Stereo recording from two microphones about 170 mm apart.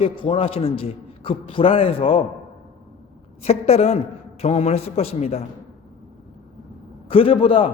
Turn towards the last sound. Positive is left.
turn(degrees=30)  # may be behind; listen again after turning